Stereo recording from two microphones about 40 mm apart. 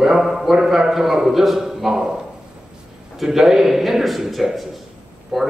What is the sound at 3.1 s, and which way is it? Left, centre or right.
A man's voice, centre.